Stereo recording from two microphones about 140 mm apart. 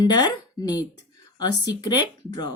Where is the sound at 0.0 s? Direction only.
30° left (ahead or behind).